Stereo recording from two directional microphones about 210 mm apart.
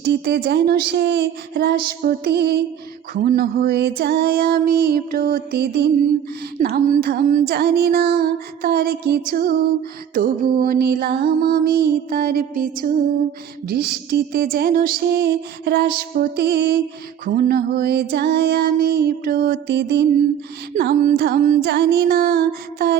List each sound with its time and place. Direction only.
0.0 s music: 50° right (ahead or behind)